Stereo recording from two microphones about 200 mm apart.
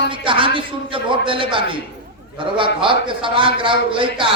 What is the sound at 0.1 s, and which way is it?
A man's voice, 25° right (ahead or behind).